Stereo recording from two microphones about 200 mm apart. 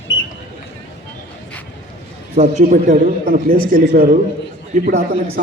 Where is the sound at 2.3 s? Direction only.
35° right (ahead or behind).